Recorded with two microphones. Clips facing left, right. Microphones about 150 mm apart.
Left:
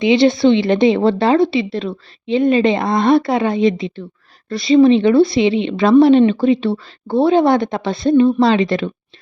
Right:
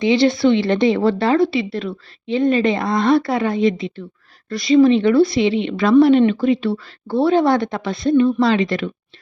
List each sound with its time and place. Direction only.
0.0 s speech: 20° left (ahead or behind)